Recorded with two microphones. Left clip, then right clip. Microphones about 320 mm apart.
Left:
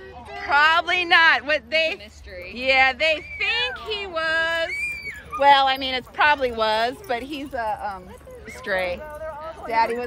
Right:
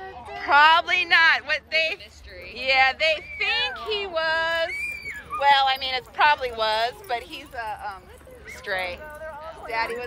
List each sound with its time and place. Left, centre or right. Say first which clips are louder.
0.4 s speech: right 1 dB; centre
9.2 s a sound: left 4 dB; left
9.7 s speech: left 6 dB; centre